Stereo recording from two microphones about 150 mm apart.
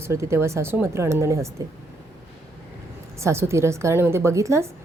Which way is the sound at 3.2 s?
20° right (ahead or behind).